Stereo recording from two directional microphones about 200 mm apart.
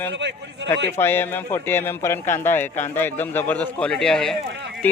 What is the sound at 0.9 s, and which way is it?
A man's voice, 10° left (ahead or behind).